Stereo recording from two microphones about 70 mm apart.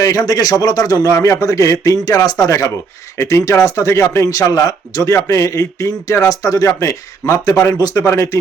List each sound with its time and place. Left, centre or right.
0.0 s speech: left
2.5 s speech: left
4.4 s speech: left
8.0 s speech: left